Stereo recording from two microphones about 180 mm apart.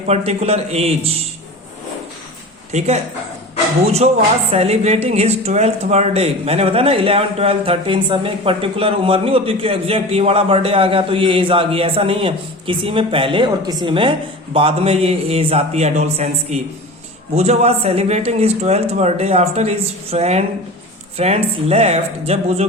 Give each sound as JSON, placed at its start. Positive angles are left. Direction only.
{"t": 0.1, "sound": "speech", "side_deg": -35}
{"t": 2.7, "sound": "speech", "side_deg": -35}
{"t": 4.5, "sound": "speech", "side_deg": -35}